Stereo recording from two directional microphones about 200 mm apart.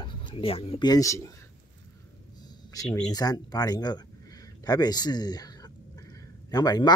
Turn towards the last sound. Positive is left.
turn(degrees=20)  # may be behind; listen again after turning